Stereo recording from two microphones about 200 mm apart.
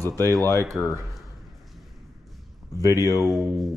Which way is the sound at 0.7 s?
Centre (ahead or behind).